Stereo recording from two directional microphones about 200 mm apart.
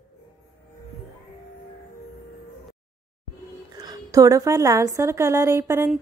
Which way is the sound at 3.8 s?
20° right (ahead or behind).